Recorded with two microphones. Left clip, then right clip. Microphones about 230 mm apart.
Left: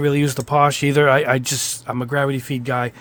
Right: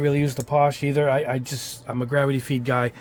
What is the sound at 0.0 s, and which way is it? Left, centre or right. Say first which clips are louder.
Speech: left 4 dB; left.